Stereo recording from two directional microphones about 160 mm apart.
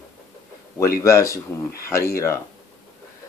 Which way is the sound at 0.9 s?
20° left (ahead or behind).